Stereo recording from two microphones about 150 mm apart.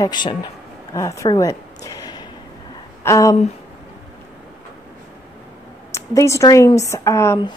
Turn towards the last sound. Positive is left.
turn(degrees=20)  # may be behind; listen again after turning